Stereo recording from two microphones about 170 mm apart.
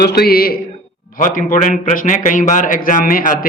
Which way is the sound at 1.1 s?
50° left (ahead or behind).